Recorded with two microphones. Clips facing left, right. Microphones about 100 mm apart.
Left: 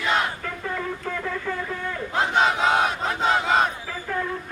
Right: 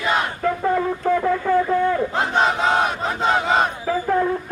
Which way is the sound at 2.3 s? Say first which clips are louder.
Right 2 dB; centre (ahead or behind).